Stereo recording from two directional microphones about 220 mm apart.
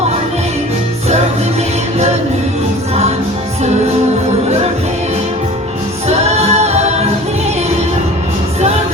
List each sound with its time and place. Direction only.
6.1 s a capella: 30° right (ahead or behind)